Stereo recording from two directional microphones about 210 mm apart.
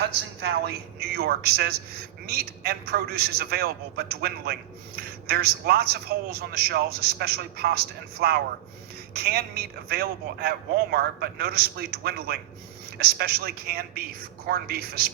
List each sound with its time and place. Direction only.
0.0 s a man's voice: 50° right (ahead or behind)